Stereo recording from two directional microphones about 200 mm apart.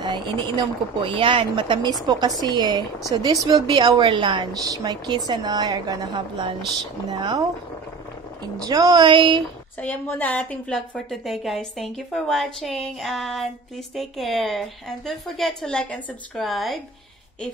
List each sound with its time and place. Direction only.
0.0 s speech: 20° right (ahead or behind)
8.5 s speech: 20° right (ahead or behind)
9.8 s a woman's voice: 10° left (ahead or behind)